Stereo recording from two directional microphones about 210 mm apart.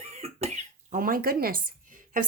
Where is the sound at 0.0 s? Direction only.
30° right (ahead or behind).